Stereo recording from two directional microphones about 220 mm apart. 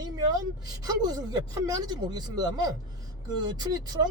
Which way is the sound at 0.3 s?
20° right (ahead or behind).